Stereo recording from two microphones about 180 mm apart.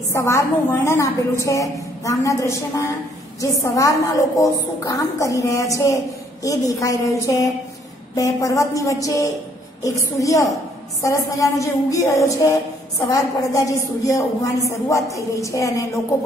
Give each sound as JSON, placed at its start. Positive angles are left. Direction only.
{"t": 0.1, "sound": "a woman's voice", "side_deg": 15}